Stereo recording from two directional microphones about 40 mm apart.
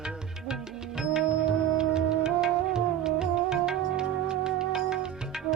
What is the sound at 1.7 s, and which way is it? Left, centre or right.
Music, centre.